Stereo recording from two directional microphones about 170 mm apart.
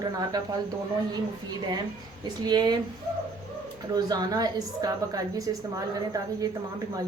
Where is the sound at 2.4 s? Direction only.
25° right (ahead or behind).